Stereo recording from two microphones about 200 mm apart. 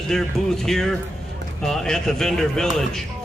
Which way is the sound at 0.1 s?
Centre (ahead or behind).